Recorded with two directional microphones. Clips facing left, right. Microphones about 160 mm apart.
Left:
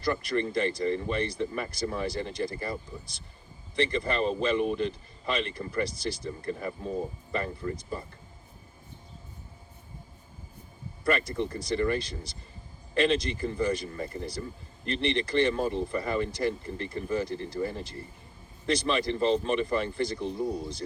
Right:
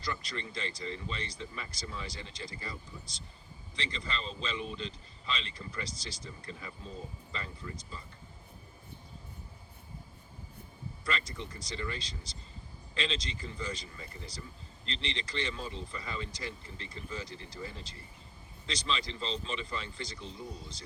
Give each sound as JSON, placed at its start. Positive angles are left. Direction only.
{"t": 0.0, "sound": "speech", "side_deg": 55}
{"t": 11.0, "sound": "speech", "side_deg": 55}